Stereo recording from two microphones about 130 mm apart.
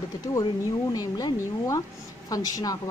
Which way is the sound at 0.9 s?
30° left (ahead or behind).